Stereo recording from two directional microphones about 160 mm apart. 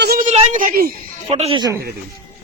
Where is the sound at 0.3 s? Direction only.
50° right (ahead or behind).